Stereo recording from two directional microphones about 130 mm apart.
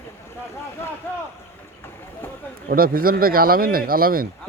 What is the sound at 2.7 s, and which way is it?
Speech, 90° right.